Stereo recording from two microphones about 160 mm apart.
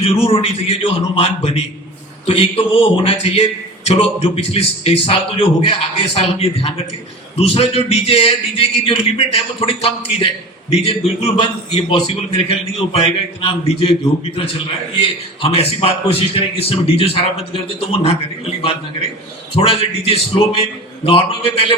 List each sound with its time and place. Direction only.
0.0 s a man's voice: 40° left (ahead or behind)
11.3 s a man's voice: 35° left (ahead or behind)
19.5 s a man's voice: 35° left (ahead or behind)